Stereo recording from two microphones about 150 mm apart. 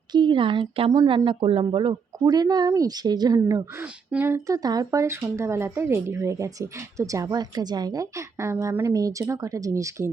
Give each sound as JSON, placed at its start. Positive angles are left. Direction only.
{"t": 0.1, "sound": "speech", "side_deg": -30}